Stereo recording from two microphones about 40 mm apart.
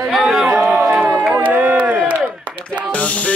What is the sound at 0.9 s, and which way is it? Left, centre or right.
Crowd, right.